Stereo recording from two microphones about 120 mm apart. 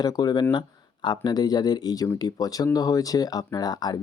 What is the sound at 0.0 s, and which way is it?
Speech, 35° left (ahead or behind).